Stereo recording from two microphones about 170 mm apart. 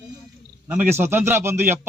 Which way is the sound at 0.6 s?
10° right (ahead or behind).